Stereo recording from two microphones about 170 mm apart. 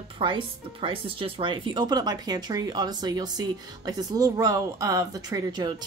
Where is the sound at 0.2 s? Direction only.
30° right (ahead or behind).